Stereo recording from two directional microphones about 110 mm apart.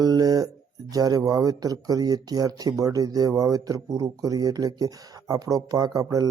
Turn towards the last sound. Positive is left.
turn(degrees=-35)  # may be behind; listen again after turning